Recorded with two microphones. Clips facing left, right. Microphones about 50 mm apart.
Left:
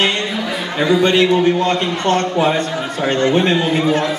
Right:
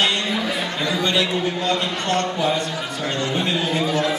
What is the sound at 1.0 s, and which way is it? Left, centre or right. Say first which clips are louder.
Speech: left 8 dB; left.